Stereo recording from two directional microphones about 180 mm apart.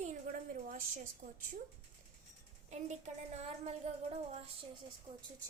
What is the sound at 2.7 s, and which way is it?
A woman's voice, 40° right (ahead or behind).